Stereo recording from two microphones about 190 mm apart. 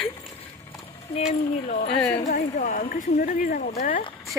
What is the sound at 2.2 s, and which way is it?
Speech, 45° left (ahead or behind).